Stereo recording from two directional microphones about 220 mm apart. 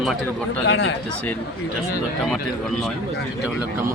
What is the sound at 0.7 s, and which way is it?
Speech, 60° left (ahead or behind).